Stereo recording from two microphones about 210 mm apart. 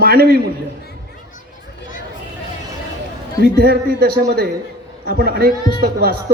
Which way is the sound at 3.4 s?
50° right (ahead or behind).